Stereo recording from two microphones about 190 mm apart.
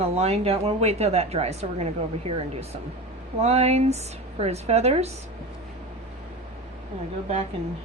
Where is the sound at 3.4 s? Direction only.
35° right (ahead or behind).